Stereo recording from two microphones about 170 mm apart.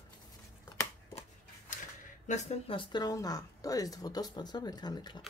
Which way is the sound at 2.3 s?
40° left (ahead or behind).